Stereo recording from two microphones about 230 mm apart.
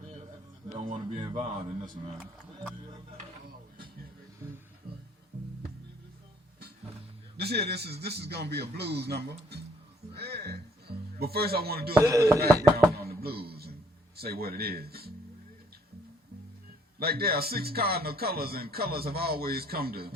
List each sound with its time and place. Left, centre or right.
0.7 s speech: right
7.3 s speech: right
10.2 s music: right
11.9 s chopping: centre
12.7 s a sound: right
14.2 s speech: right
17.0 s speech: right